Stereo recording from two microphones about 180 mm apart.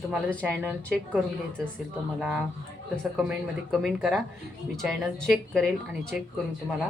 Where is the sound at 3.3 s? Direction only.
Centre (ahead or behind).